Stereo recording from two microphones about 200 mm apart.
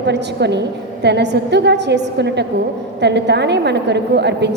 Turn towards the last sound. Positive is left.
turn(degrees=-60)  # may be behind; listen again after turning